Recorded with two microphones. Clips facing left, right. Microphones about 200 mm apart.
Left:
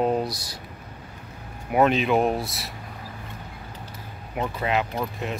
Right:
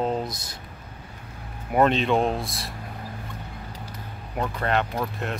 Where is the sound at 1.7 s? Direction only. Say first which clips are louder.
Even; 5° left (ahead or behind).